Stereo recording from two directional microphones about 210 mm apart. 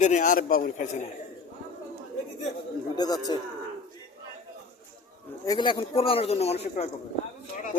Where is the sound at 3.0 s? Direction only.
20° left (ahead or behind).